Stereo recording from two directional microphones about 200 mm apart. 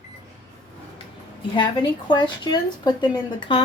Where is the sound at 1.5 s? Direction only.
25° left (ahead or behind).